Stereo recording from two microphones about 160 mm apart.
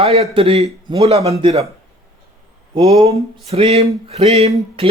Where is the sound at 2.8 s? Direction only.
40° right (ahead or behind).